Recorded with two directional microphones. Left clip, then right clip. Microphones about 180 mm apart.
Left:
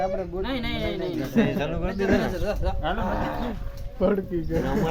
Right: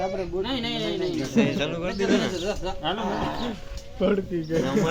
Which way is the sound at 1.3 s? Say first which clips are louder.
Even; 50° left (ahead or behind).